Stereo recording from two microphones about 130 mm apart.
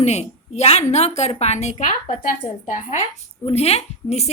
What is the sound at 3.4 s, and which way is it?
Speech, 55° left (ahead or behind).